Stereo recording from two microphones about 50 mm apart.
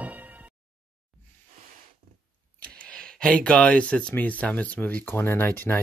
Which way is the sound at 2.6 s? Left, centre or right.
Left.